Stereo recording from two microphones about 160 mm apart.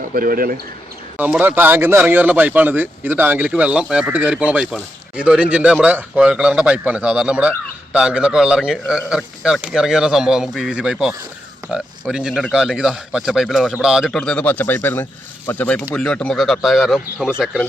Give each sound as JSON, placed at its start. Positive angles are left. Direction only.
{"t": 0.1, "sound": "speech", "side_deg": -65}
{"t": 1.1, "sound": "a man's voice", "side_deg": -10}